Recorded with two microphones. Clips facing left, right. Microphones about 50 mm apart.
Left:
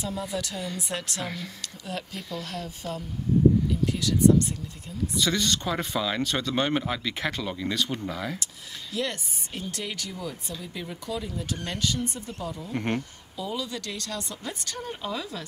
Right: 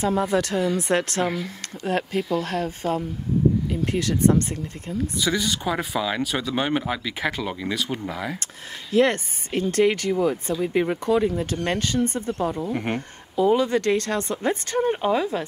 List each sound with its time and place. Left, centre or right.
0.0 s speech: right
5.2 s speech: centre
8.9 s speech: right
12.7 s speech: centre
13.4 s speech: right